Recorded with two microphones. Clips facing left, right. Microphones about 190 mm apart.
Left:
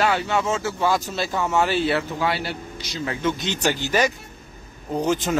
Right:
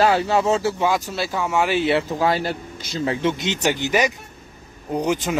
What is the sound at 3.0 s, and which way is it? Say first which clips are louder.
Speech: right 3 dB; 25° right (ahead or behind).